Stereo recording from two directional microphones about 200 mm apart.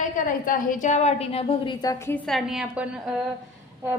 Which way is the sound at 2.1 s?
Centre (ahead or behind).